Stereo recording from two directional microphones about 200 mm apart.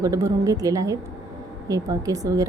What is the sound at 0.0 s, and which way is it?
A woman's voice, 15° right (ahead or behind).